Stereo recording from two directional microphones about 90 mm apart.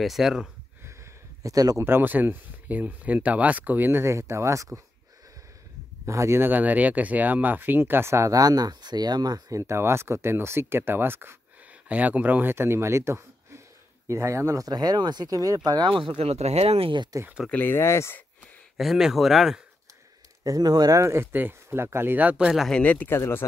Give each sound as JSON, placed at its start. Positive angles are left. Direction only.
{"t": 0.0, "sound": "speech", "side_deg": 0}
{"t": 1.4, "sound": "speech", "side_deg": -40}
{"t": 1.9, "sound": "speech", "side_deg": -20}
{"t": 6.0, "sound": "speech", "side_deg": -30}
{"t": 14.7, "sound": "speech", "side_deg": -50}
{"t": 15.9, "sound": "speech", "side_deg": -75}
{"t": 17.5, "sound": "speech", "side_deg": 25}
{"t": 18.8, "sound": "speech", "side_deg": -5}
{"t": 20.4, "sound": "speech", "side_deg": -45}
{"t": 21.0, "sound": "speech", "side_deg": -30}
{"t": 22.7, "sound": "speech", "side_deg": 15}